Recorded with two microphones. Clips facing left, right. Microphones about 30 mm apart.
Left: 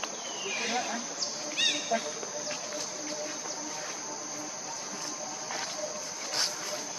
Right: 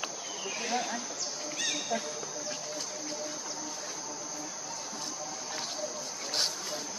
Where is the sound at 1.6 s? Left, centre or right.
Left.